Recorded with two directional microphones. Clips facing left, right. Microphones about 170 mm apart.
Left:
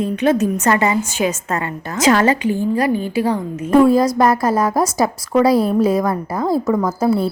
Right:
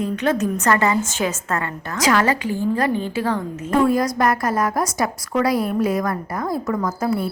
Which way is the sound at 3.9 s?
30° left (ahead or behind).